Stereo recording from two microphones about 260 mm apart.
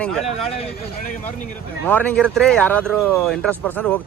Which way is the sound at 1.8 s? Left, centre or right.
Centre.